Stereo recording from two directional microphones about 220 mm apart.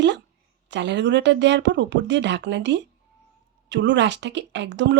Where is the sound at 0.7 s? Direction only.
55° right (ahead or behind).